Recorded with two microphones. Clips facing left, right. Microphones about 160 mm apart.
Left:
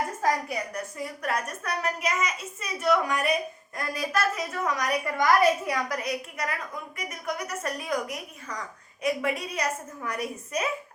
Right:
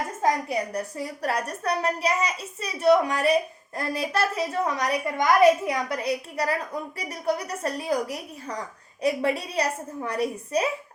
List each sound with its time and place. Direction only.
0.2 s a woman's voice: 25° right (ahead or behind)